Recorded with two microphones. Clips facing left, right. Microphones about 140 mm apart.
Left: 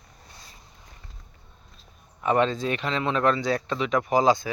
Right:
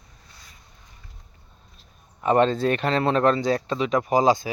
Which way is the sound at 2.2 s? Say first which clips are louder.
Right 3 dB; 35° right (ahead or behind).